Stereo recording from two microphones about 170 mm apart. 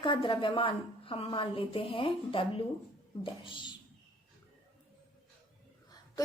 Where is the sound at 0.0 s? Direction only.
30° left (ahead or behind).